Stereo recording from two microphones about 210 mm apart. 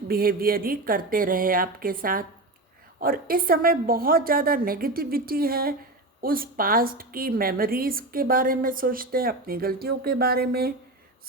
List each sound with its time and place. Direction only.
0.1 s a woman's voice: 45° right (ahead or behind)